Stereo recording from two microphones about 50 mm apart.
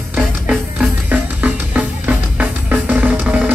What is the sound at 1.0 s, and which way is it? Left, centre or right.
Music, right.